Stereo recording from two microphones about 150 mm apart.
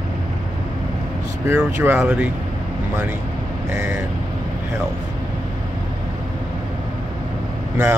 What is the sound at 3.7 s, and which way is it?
Speech, 15° right (ahead or behind).